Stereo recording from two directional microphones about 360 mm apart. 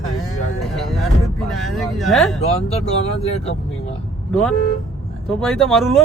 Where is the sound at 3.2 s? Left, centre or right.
Centre.